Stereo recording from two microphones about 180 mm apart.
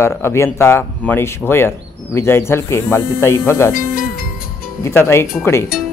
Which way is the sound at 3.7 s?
50° left (ahead or behind).